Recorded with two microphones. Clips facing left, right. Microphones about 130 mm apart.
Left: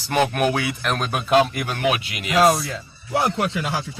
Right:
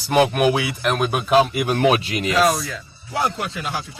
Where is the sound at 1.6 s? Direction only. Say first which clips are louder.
Right 5 dB; 30° right (ahead or behind).